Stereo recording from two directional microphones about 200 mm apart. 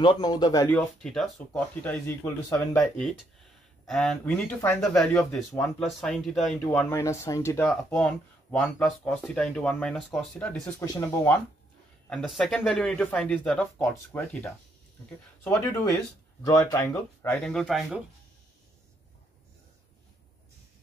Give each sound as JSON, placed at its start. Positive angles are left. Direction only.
{"t": 0.0, "sound": "a man's voice", "side_deg": 20}
{"t": 5.6, "sound": "speech", "side_deg": 0}
{"t": 10.8, "sound": "speech", "side_deg": 15}
{"t": 12.1, "sound": "speech", "side_deg": 0}